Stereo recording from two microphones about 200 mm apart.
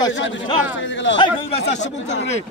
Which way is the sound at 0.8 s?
70° left (ahead or behind).